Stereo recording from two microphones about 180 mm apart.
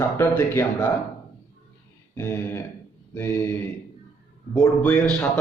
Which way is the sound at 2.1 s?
10° left (ahead or behind).